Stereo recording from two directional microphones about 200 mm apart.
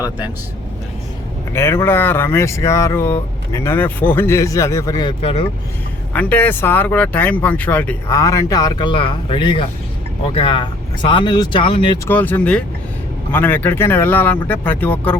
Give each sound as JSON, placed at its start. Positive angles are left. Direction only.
{"t": 1.5, "sound": "speech", "side_deg": 10}
{"t": 6.1, "sound": "speech", "side_deg": 10}
{"t": 12.0, "sound": "speech", "side_deg": 10}